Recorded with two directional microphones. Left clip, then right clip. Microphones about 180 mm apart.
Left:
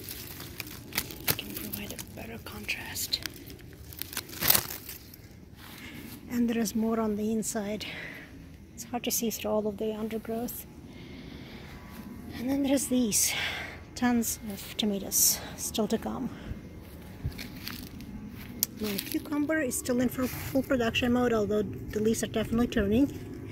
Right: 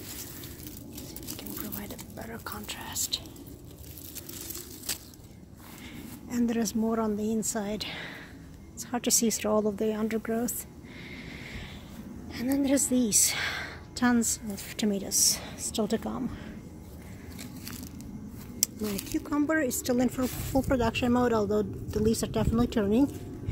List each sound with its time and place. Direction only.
1.8 s a sound: 5° left (ahead or behind)
2.4 s speech: 5° right (ahead or behind)
6.2 s speech: centre (ahead or behind)
8.7 s speech: 20° right (ahead or behind)
12.3 s a woman's voice: 5° right (ahead or behind)
17.4 s crushing: 5° right (ahead or behind)
18.6 s speech: centre (ahead or behind)